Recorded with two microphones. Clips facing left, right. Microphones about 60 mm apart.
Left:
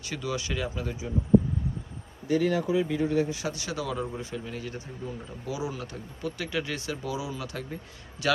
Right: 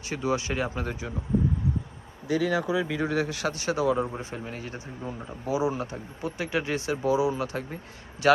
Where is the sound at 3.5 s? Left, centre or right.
Right.